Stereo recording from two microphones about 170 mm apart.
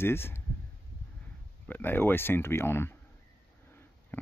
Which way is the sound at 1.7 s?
10° left (ahead or behind).